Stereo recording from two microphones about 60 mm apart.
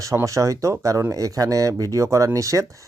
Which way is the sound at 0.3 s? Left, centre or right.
Right.